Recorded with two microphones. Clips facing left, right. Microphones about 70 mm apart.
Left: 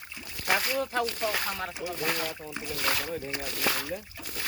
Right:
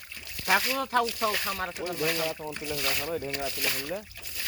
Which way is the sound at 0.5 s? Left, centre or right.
Right.